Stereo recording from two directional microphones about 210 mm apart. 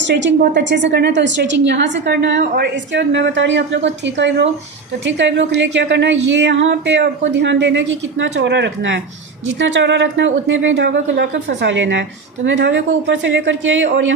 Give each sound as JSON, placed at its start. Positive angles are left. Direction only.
{"t": 0.0, "sound": "a woman's voice", "side_deg": -60}